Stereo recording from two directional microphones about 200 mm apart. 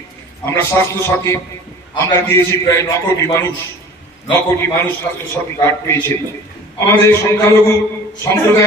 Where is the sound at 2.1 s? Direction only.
15° left (ahead or behind).